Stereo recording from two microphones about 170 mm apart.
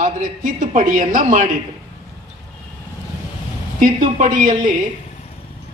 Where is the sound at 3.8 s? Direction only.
50° right (ahead or behind).